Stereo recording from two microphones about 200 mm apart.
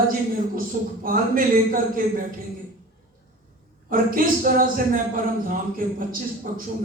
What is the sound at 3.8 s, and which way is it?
A man's voice, 45° right (ahead or behind).